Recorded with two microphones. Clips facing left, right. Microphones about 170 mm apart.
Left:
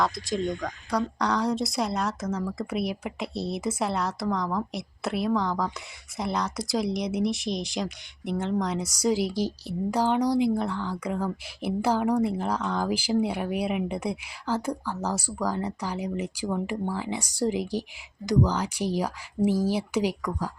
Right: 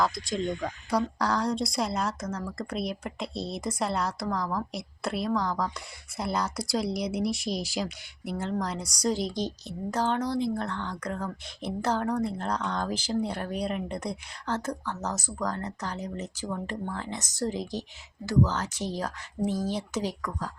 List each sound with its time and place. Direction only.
0.0 s a woman's voice: centre (ahead or behind)